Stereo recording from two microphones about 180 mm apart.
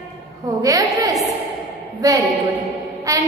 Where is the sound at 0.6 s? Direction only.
20° right (ahead or behind).